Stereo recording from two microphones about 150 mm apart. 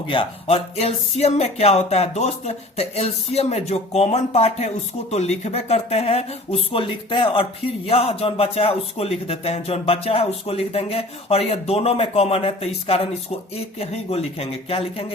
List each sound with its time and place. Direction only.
0.1 s speech: 40° left (ahead or behind)